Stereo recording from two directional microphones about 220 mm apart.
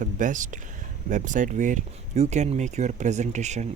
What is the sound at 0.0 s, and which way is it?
Speech, 35° right (ahead or behind).